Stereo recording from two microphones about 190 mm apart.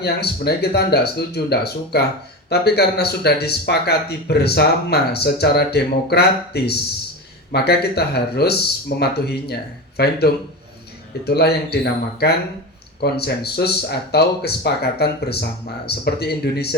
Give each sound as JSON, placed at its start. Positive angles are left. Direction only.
{"t": 0.0, "sound": "speech", "side_deg": 55}